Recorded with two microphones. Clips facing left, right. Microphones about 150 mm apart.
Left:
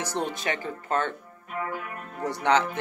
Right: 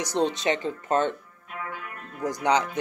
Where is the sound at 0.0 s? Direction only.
20° right (ahead or behind).